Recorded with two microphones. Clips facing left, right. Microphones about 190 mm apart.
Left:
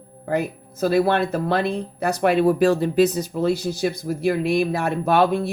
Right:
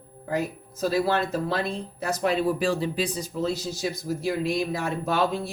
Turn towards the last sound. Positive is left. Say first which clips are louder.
# left 6 dB
turn(degrees=60)  # may be behind; listen again after turning